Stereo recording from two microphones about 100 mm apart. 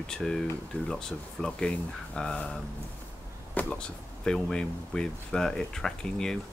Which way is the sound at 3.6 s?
15° left (ahead or behind).